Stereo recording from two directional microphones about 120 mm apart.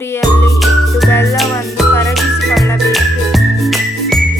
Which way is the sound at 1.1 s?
25° left (ahead or behind).